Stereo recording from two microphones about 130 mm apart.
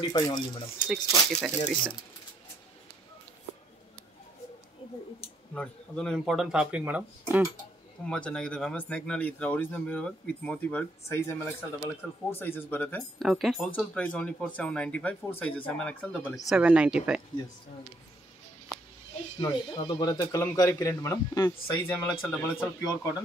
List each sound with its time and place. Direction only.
0.0 s speech: 35° left (ahead or behind)
0.8 s speech: centre (ahead or behind)
5.5 s speech: 5° left (ahead or behind); by 7.4 s 10° right (ahead or behind)
8.0 s speech: 10° left (ahead or behind)
13.2 s speech: centre (ahead or behind)
13.9 s speech: 10° left (ahead or behind)
16.4 s speech: 10° right (ahead or behind)
18.7 s a sound: 25° left (ahead or behind)
19.4 s speech: 30° left (ahead or behind)
22.2 s speech: centre (ahead or behind)
22.8 s speech: 30° left (ahead or behind)